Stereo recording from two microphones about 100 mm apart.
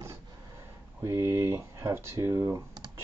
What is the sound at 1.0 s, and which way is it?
Speech, 30° right (ahead or behind).